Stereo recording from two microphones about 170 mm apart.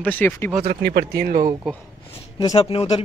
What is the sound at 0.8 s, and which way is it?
Speech, 70° right (ahead or behind).